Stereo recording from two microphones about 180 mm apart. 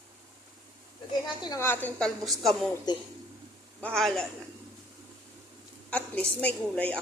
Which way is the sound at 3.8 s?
5° left (ahead or behind).